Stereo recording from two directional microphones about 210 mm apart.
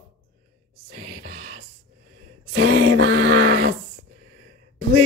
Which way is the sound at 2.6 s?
90° right.